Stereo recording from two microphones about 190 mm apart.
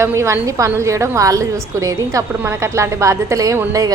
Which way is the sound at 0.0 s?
15° right (ahead or behind).